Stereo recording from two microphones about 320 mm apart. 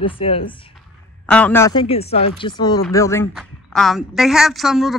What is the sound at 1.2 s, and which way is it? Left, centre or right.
A woman's voice, centre.